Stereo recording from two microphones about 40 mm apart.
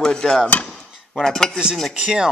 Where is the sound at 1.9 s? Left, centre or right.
Centre.